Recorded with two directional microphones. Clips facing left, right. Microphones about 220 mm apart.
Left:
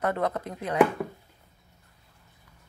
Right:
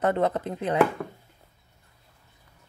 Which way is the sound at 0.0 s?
30° right (ahead or behind).